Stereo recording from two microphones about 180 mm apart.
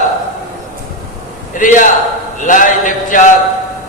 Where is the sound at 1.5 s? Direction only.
45° left (ahead or behind).